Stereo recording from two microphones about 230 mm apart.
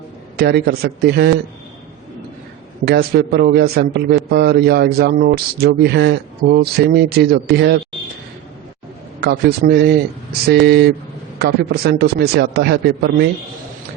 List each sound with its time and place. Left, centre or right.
0.3 s a man's voice: right
2.8 s a man's voice: right
9.2 s a man's voice: right